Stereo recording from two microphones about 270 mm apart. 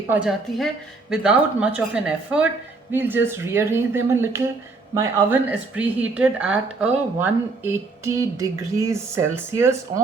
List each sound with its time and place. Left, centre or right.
0.1 s a woman's voice: centre